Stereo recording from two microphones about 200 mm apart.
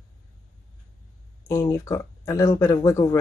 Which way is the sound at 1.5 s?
15° left (ahead or behind).